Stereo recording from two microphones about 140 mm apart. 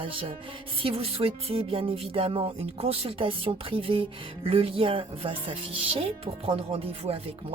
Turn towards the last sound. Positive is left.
turn(degrees=-45)  # may be behind; listen again after turning